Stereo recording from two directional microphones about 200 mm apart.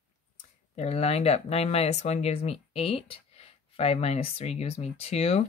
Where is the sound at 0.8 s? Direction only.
30° left (ahead or behind).